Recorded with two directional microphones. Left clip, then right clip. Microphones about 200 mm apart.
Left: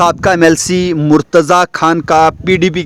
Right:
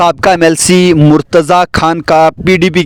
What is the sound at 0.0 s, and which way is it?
Speech, 45° right (ahead or behind).